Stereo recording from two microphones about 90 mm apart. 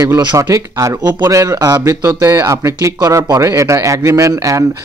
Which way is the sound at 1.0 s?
50° right (ahead or behind).